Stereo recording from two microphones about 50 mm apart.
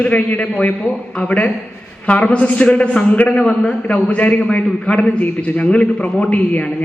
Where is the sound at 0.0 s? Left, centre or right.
Left.